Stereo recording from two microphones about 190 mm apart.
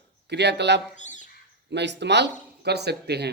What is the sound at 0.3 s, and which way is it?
A man's voice, 65° right (ahead or behind).